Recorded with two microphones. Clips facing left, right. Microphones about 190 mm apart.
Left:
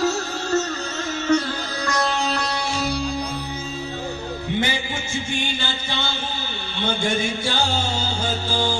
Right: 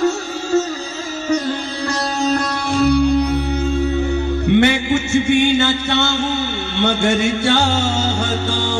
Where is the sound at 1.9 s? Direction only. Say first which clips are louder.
Right 4 dB; 45° right (ahead or behind); by 3.2 s 60° right (ahead or behind).